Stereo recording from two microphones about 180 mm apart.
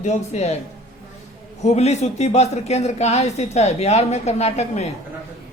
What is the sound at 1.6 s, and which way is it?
Speech, 35° left (ahead or behind).